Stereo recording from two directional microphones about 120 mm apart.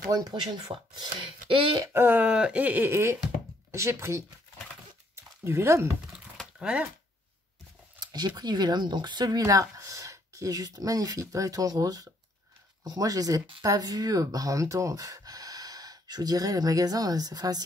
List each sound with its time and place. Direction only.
0.1 s speech: 35° right (ahead or behind)
1.8 s speech: 20° right (ahead or behind)
5.1 s a sound: 20° right (ahead or behind)
6.1 s typing: 5° right (ahead or behind)
8.0 s a sound: 35° right (ahead or behind)
8.4 s speech: 35° right (ahead or behind)